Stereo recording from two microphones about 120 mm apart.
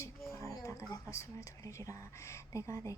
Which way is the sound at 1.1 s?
25° left (ahead or behind).